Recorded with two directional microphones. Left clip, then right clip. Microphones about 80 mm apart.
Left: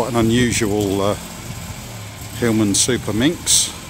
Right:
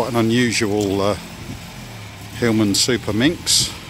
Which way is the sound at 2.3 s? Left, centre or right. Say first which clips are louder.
Even; centre.